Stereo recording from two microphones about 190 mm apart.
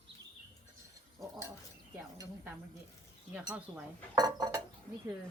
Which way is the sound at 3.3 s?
5° right (ahead or behind).